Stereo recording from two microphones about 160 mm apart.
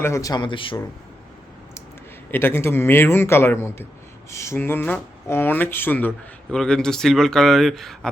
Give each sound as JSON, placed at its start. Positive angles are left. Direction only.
{"t": 0.0, "sound": "speech", "side_deg": 20}
{"t": 2.3, "sound": "speech", "side_deg": 15}